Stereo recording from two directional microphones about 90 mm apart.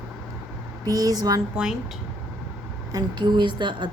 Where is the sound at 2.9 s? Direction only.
55° right (ahead or behind).